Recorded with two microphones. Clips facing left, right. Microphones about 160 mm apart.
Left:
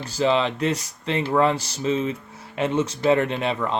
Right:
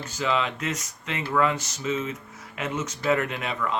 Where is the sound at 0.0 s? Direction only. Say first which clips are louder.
Left 5 dB; 35° left (ahead or behind).